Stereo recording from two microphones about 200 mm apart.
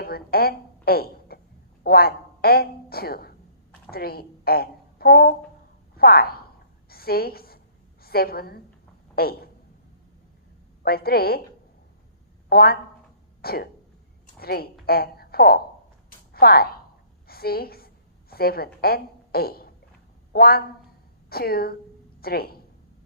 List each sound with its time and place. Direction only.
0.0 s a woman's voice: 50° left (ahead or behind)
6.0 s a sound: 50° left (ahead or behind)
8.0 s a woman's voice: 50° left (ahead or behind)
10.8 s a woman's voice: 50° left (ahead or behind)
12.5 s a woman's voice: 50° left (ahead or behind)
13.4 s cough: 50° left (ahead or behind)
14.3 s a woman's voice: 50° left (ahead or behind)
16.0 s a sound: 50° left (ahead or behind)
20.3 s a woman's voice: 50° left (ahead or behind)